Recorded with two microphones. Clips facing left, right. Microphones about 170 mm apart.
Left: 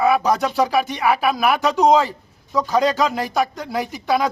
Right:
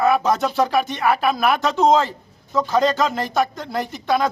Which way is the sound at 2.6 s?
Centre (ahead or behind).